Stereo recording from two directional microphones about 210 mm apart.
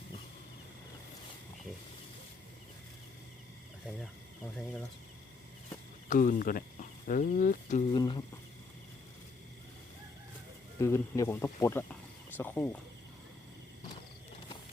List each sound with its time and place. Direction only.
6.1 s speech: 40° left (ahead or behind)
7.9 s speech: 20° left (ahead or behind)
10.8 s speech: 15° left (ahead or behind)